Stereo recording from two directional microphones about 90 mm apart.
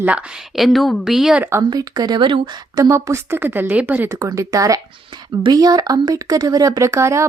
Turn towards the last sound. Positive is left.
turn(degrees=-35)  # may be behind; listen again after turning